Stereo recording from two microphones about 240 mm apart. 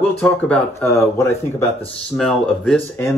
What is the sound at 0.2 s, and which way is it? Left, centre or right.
Speech, centre.